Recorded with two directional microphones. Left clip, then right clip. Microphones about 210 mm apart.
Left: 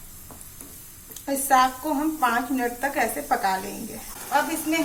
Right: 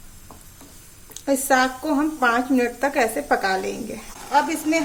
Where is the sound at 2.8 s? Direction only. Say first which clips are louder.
Right 4 dB; 50° right (ahead or behind).